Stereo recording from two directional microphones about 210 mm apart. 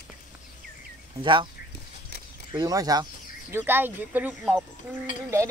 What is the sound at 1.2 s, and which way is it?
Speech, 25° right (ahead or behind).